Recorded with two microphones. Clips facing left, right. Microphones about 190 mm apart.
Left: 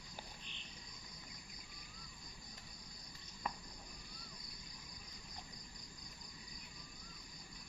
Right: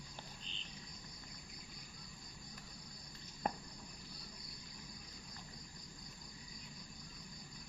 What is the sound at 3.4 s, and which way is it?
Cricket, 45° right (ahead or behind).